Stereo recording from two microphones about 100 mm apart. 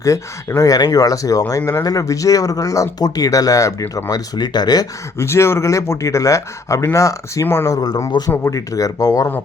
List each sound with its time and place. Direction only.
0.0 s speech: 30° left (ahead or behind)
5.1 s speech: 25° left (ahead or behind)
7.7 s speech: 35° left (ahead or behind)